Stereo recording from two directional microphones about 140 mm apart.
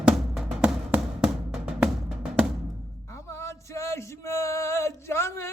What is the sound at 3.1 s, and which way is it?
Male singing, 20° left (ahead or behind).